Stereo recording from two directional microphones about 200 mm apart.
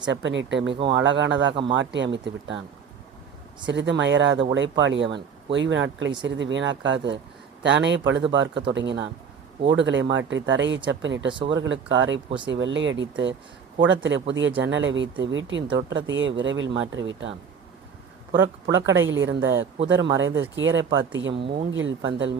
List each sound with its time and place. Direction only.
0.0 s speech: 65° right (ahead or behind)
3.7 s speech: 65° right (ahead or behind)
18.7 s speech: 70° right (ahead or behind)